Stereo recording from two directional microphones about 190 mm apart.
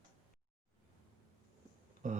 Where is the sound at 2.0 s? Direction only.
40° right (ahead or behind).